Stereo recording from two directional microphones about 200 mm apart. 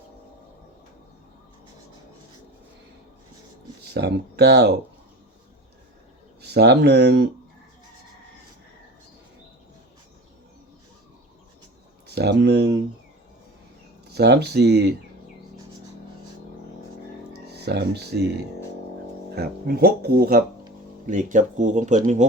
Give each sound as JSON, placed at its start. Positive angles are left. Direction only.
{"t": 3.8, "sound": "speech", "side_deg": -55}
{"t": 6.4, "sound": "speech", "side_deg": -55}
{"t": 12.0, "sound": "speech", "side_deg": -55}
{"t": 14.1, "sound": "speech", "side_deg": -55}
{"t": 17.5, "sound": "speech", "side_deg": -55}
{"t": 19.4, "sound": "speech", "side_deg": -50}